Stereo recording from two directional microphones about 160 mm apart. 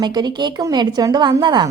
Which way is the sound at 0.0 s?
25° right (ahead or behind).